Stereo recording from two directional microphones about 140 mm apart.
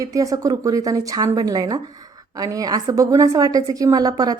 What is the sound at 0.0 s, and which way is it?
Speech, 25° right (ahead or behind).